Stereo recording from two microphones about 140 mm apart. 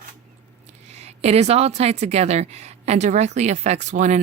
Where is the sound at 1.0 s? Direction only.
50° right (ahead or behind).